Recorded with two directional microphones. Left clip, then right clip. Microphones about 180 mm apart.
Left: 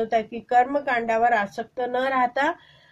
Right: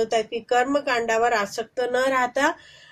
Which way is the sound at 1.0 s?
20° right (ahead or behind).